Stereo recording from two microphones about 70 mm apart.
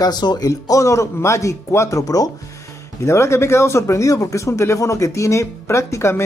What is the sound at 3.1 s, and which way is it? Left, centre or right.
Speech, left.